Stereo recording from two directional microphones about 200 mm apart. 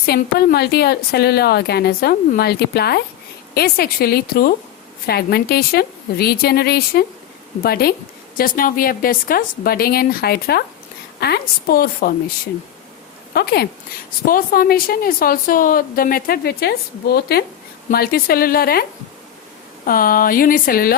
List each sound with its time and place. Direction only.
0.0 s a woman's voice: 50° left (ahead or behind)
13.3 s a woman's voice: 50° left (ahead or behind)